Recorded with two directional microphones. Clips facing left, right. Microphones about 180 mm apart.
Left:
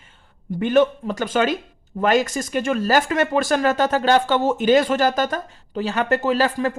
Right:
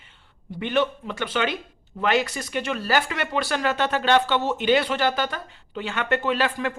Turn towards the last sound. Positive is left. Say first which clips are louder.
# left 4 dB
turn(degrees=40)  # may be behind; listen again after turning